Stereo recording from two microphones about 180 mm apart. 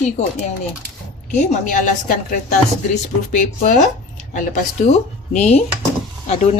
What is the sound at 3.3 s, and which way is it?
A woman's voice, 45° left (ahead or behind).